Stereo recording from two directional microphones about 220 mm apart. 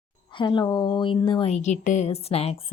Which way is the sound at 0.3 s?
20° left (ahead or behind).